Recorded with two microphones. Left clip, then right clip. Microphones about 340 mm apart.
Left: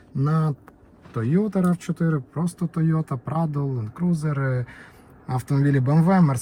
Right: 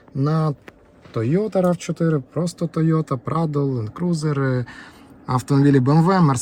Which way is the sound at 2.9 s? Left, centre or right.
Right.